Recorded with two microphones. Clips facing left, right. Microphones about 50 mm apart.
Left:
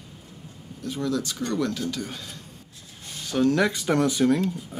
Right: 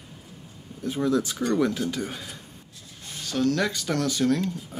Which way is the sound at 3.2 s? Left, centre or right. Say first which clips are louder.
Left 3 dB; centre.